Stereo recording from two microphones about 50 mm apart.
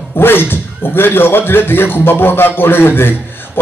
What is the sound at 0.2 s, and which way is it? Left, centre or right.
Speech, left.